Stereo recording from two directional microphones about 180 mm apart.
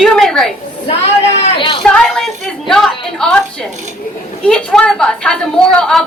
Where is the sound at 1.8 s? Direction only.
5° left (ahead or behind).